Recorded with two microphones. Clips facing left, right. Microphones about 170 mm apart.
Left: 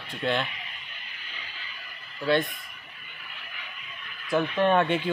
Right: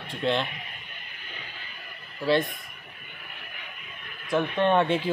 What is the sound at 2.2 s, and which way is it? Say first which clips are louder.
Speech: right 1 dB; centre (ahead or behind).